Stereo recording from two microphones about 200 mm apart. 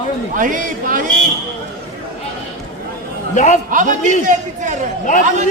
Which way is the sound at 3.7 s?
40° right (ahead or behind).